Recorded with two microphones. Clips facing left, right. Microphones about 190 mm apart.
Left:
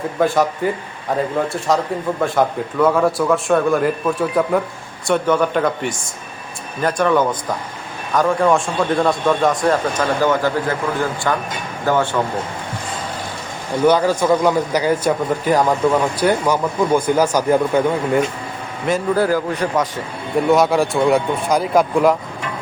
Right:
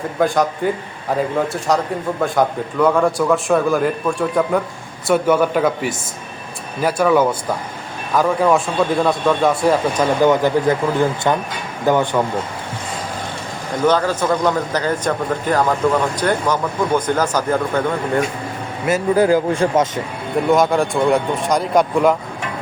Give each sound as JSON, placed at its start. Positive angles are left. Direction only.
{"t": 0.2, "sound": "a man's voice", "side_deg": 0}
{"t": 13.8, "sound": "a man's voice", "side_deg": 10}
{"t": 18.9, "sound": "speech", "side_deg": -5}
{"t": 19.2, "sound": "a man's voice", "side_deg": -20}
{"t": 20.5, "sound": "a man's voice", "side_deg": 0}